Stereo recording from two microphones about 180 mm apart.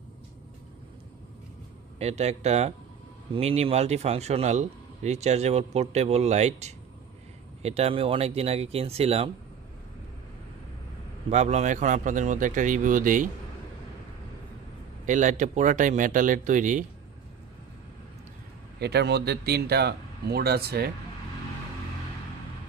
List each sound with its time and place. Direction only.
2.0 s speech: 35° right (ahead or behind)
11.2 s speech: 40° right (ahead or behind)
15.0 s speech: 45° right (ahead or behind)
18.8 s speech: 65° right (ahead or behind)